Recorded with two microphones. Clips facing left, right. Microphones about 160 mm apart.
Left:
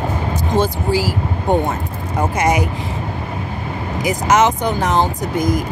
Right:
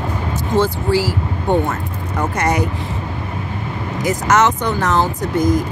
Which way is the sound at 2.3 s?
10° left (ahead or behind).